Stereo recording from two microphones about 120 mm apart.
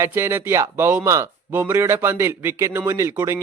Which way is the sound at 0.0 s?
20° right (ahead or behind).